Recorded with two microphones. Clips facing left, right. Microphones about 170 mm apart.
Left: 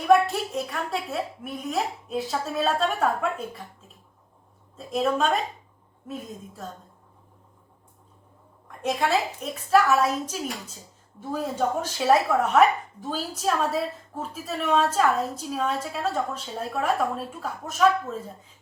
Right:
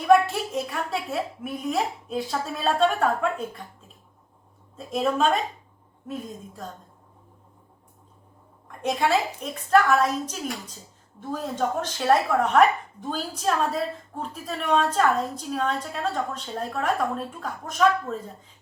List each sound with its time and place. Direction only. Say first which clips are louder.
0.1 s speech: right 1 dB; centre (ahead or behind)
4.8 s speech: right 1 dB; centre (ahead or behind)
8.6 s speech: right 1 dB; centre (ahead or behind)